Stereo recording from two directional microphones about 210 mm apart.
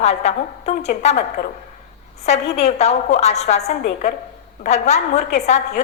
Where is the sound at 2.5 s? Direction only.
30° left (ahead or behind).